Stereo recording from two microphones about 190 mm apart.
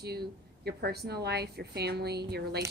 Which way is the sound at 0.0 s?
55° right (ahead or behind).